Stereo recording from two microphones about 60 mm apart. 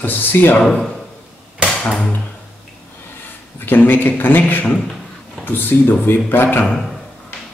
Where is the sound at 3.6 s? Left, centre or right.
Left.